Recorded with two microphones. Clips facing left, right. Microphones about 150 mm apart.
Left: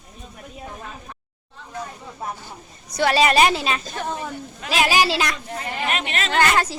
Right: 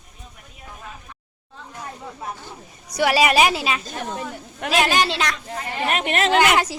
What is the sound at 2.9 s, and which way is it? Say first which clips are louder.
A woman's voice: even; 10° right (ahead or behind).